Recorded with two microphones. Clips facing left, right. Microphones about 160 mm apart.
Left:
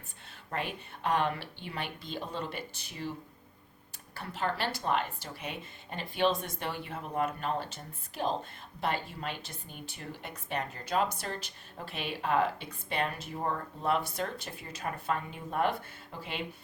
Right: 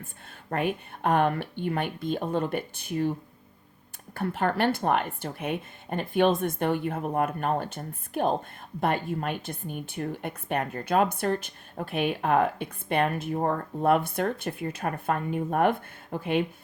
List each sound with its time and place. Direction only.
0.0 s a woman's voice: 55° right (ahead or behind)